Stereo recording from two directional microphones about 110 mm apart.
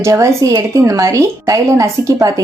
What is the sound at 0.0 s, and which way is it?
A woman's voice, 30° right (ahead or behind).